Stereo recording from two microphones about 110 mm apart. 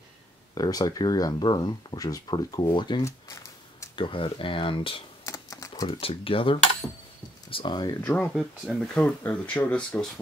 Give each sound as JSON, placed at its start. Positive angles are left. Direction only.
{"t": 0.6, "sound": "speech", "side_deg": 35}
{"t": 3.0, "sound": "speech", "side_deg": 30}
{"t": 3.9, "sound": "speech", "side_deg": 50}
{"t": 5.2, "sound": "typing", "side_deg": 30}
{"t": 5.9, "sound": "speech", "side_deg": 55}
{"t": 8.2, "sound": "speech", "side_deg": 5}